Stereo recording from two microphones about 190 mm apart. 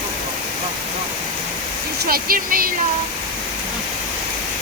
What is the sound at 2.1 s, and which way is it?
Speech, 50° right (ahead or behind).